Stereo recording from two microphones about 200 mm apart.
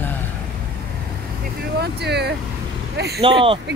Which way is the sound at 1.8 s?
55° right (ahead or behind).